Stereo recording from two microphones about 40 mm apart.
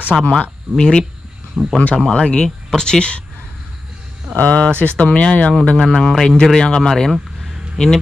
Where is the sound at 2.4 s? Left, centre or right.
Centre.